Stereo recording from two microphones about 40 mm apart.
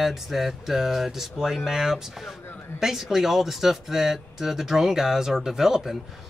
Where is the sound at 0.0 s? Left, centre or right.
Centre.